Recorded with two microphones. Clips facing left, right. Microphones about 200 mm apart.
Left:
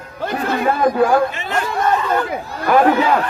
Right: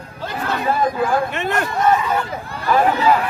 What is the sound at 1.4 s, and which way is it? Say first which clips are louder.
Speech: right 1 dB; 60° right (ahead or behind).